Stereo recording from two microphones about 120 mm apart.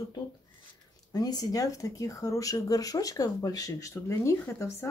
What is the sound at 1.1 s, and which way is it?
Speech, 35° left (ahead or behind).